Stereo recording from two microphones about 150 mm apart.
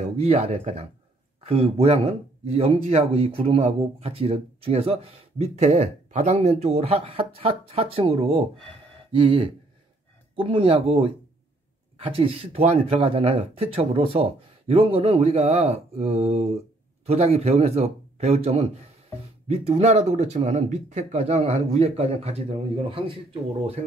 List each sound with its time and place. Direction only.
0.2 s speech: 45° right (ahead or behind)